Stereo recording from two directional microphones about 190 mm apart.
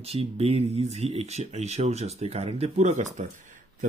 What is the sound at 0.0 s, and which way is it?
Speech, 30° right (ahead or behind).